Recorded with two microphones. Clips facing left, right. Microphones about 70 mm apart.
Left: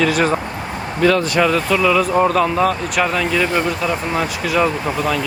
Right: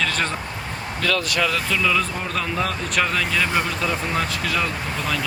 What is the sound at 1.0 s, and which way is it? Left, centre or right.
Speech, left.